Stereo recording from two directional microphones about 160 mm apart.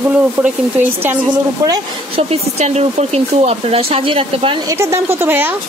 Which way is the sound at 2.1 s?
40° right (ahead or behind).